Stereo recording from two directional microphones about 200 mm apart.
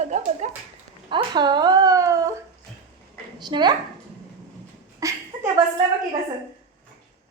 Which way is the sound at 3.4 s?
20° right (ahead or behind).